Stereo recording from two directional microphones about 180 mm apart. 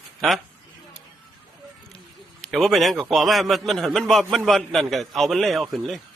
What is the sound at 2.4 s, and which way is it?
A man's voice, centre (ahead or behind).